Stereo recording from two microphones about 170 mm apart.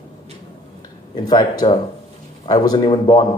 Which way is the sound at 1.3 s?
25° left (ahead or behind).